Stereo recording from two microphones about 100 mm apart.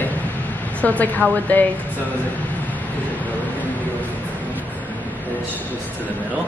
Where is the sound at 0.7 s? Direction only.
15° left (ahead or behind).